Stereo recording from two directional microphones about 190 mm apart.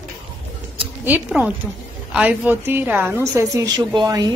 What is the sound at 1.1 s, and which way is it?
A woman's voice, 10° right (ahead or behind).